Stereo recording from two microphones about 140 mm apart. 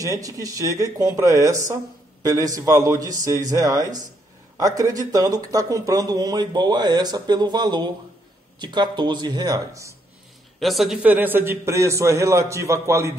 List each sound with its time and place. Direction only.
0.0 s speech: 25° right (ahead or behind)
10.6 s speech: centre (ahead or behind); by 13.1 s 20° right (ahead or behind)